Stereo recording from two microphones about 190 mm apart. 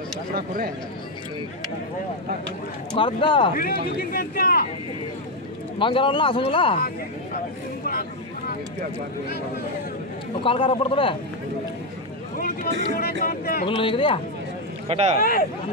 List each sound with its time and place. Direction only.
0.3 s speech: 50° right (ahead or behind)
2.9 s speech: 25° left (ahead or behind)
3.5 s speech: 50° left (ahead or behind)
5.8 s speech: 25° left (ahead or behind)
7.8 s speech: 50° left (ahead or behind)
10.4 s speech: 30° left (ahead or behind)
12.4 s speech: 50° left (ahead or behind)
13.7 s speech: 25° left (ahead or behind)
14.9 s speech: 35° right (ahead or behind)